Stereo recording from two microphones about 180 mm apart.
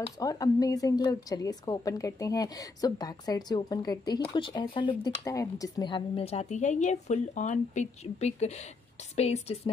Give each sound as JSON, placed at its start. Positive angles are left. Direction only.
{"t": 0.2, "sound": "a woman's voice", "side_deg": 20}